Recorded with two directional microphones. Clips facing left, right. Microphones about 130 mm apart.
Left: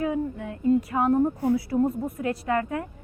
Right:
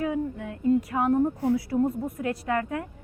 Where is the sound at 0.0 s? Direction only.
30° left (ahead or behind).